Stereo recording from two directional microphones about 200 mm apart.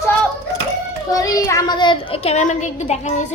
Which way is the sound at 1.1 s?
15° left (ahead or behind).